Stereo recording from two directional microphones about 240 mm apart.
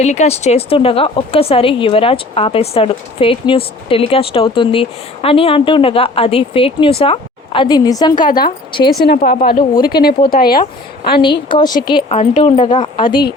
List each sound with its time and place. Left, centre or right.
0.0 s a woman's voice: left
9.0 s speech: left
11.2 s a woman's voice: centre